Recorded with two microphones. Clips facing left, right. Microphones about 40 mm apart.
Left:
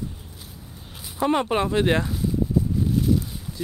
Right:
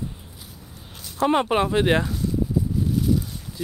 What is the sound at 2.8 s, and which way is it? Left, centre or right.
Boat, centre.